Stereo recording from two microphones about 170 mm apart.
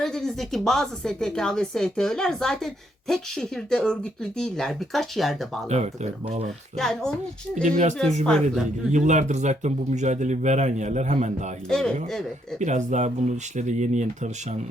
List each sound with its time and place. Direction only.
0.0 s a woman's voice: 5° left (ahead or behind)
5.6 s speech: 40° right (ahead or behind)
6.7 s a woman's voice: centre (ahead or behind)
7.6 s speech: 45° right (ahead or behind)
8.2 s a woman's voice: 5° left (ahead or behind)
8.9 s speech: 45° right (ahead or behind)
11.7 s a woman's voice: 5° left (ahead or behind)
12.5 s speech: 45° right (ahead or behind)